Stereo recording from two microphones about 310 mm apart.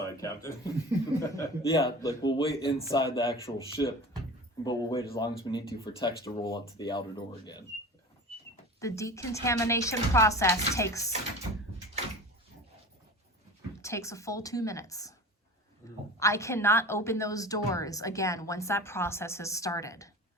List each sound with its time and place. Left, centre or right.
0.0 s a woman's voice: centre
8.3 s a sound: centre
8.8 s a woman's voice: centre
13.8 s a woman's voice: centre
16.1 s a woman's voice: centre